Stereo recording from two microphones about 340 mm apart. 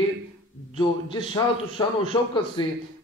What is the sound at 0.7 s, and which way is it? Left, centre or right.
Speech, centre.